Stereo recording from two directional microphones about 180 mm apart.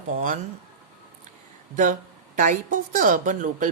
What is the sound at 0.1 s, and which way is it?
Speech, 45° right (ahead or behind).